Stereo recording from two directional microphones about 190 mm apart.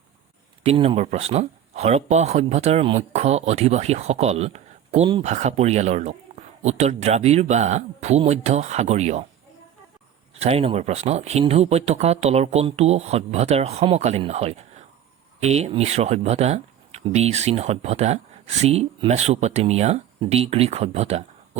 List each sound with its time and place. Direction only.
0.6 s speech: 30° right (ahead or behind)
10.4 s speech: 30° right (ahead or behind)